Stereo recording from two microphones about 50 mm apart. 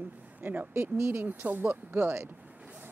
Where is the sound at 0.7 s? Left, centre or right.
Right.